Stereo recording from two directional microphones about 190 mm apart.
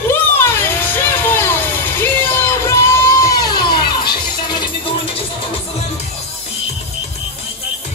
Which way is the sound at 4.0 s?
25° left (ahead or behind).